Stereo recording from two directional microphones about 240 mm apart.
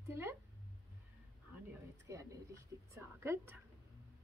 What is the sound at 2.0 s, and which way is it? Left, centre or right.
Speech, centre.